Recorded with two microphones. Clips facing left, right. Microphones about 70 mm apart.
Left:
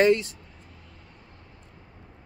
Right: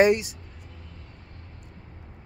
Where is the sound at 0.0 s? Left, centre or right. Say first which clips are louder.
Right 1 dB; centre.